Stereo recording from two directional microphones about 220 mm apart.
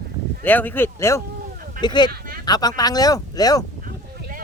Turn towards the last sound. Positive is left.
turn(degrees=-40)  # may be behind; listen again after turning